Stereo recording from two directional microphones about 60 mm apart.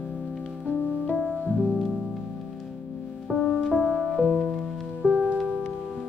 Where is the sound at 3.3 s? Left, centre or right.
Centre.